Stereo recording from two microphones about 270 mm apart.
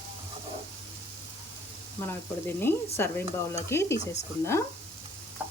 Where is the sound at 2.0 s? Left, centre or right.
Centre.